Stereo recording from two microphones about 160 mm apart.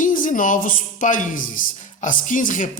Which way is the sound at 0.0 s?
55° left (ahead or behind).